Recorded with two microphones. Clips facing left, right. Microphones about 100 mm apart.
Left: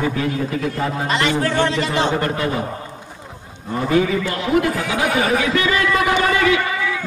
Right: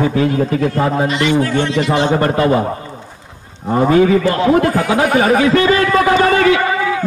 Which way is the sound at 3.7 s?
45° right (ahead or behind).